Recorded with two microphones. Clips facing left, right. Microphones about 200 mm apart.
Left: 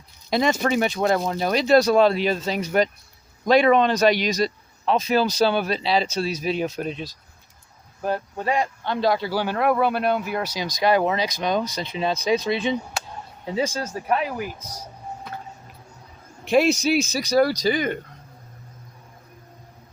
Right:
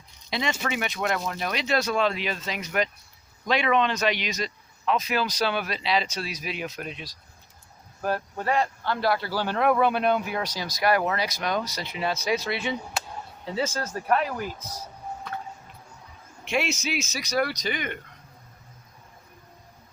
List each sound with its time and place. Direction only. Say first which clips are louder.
0.3 s speech: left 8 dB; 45° left (ahead or behind)
8.0 s speech: left 2 dB; 20° left (ahead or behind)
10.6 s speech: left 4 dB; 15° left (ahead or behind)
16.4 s speech: left 9 dB; 40° left (ahead or behind)